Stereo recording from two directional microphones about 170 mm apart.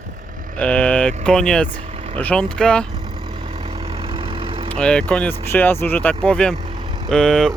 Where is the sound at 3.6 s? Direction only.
35° right (ahead or behind).